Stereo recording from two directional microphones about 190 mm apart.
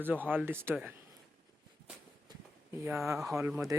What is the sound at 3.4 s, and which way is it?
Speech, 15° right (ahead or behind).